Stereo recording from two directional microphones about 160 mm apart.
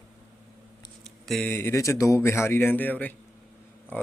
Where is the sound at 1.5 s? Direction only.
15° left (ahead or behind).